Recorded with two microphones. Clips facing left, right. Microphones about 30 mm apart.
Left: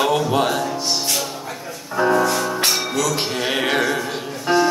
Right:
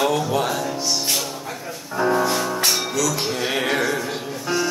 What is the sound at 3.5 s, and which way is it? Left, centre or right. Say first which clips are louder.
Music: left 3 dB; centre.